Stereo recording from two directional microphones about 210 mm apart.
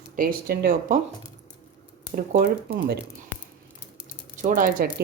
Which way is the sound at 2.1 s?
45° right (ahead or behind).